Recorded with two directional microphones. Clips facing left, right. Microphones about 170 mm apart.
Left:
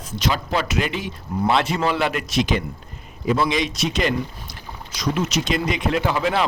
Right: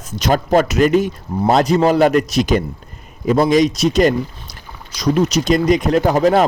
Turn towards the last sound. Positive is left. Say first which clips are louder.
# right 8 dB
turn(degrees=-40)  # may be behind; listen again after turning